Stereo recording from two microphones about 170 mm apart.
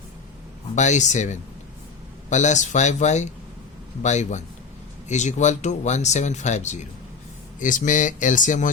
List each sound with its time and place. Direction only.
0.8 s speech: 45° left (ahead or behind)